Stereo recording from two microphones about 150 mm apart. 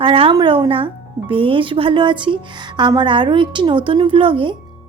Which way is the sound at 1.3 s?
35° right (ahead or behind).